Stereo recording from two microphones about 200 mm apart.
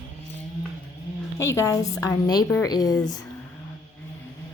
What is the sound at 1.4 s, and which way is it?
A woman's voice, 15° left (ahead or behind).